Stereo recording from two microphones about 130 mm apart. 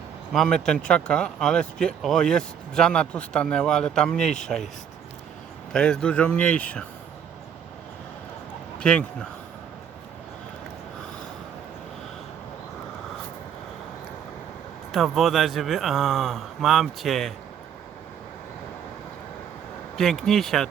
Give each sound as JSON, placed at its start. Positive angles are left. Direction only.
{"t": 0.3, "sound": "speech", "side_deg": 5}
{"t": 5.7, "sound": "speech", "side_deg": 5}
{"t": 8.8, "sound": "speech", "side_deg": 5}
{"t": 14.9, "sound": "speech", "side_deg": 0}
{"t": 20.0, "sound": "speech", "side_deg": 5}